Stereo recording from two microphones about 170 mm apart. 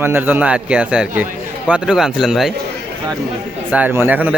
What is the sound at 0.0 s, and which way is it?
A man's voice, 10° right (ahead or behind).